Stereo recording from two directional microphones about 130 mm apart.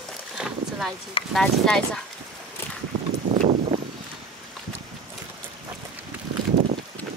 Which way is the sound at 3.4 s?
65° right (ahead or behind).